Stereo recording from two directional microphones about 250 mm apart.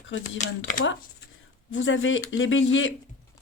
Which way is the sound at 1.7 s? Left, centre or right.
Left.